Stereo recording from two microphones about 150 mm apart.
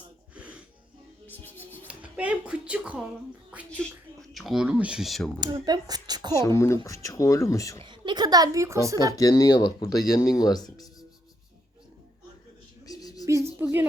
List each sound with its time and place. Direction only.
0.3 s music: 10° right (ahead or behind)
1.5 s music: 15° left (ahead or behind)
1.9 s speech: 10° right (ahead or behind)
3.7 s speech: 5° left (ahead or behind)
5.4 s speech: 25° right (ahead or behind)
6.3 s speech: 20° left (ahead or behind)
7.9 s speech: 30° right (ahead or behind)
9.1 s speech: 20° left (ahead or behind)
12.8 s a sound: 25° left (ahead or behind)
13.2 s a sound: 20° right (ahead or behind)